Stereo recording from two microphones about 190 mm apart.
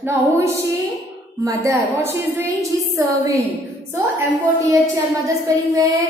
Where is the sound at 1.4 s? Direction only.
15° right (ahead or behind).